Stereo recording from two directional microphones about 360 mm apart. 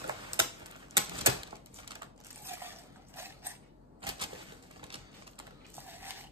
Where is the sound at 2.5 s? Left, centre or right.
Centre.